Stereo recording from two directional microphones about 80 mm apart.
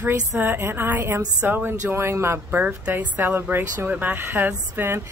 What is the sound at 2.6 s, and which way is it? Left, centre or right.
Speech, centre.